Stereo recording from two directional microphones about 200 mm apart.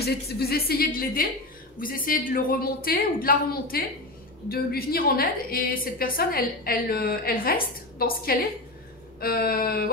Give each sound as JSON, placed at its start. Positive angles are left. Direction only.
{"t": 0.0, "sound": "a woman's voice", "side_deg": 50}